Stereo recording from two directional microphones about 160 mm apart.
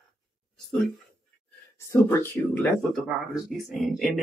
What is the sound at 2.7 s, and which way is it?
Speech, 5° right (ahead or behind).